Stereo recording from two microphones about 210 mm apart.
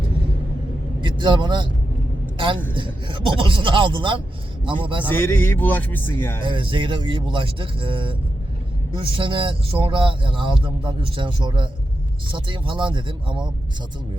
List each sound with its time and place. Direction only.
1.0 s a man's voice: 20° right (ahead or behind)
2.7 s speech: 25° right (ahead or behind)
5.0 s speech: 10° left (ahead or behind)
6.4 s speech: 25° right (ahead or behind)